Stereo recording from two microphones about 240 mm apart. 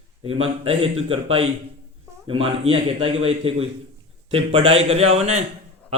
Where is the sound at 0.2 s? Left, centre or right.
Right.